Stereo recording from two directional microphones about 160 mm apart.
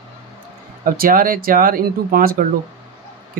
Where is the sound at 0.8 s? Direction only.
60° right (ahead or behind).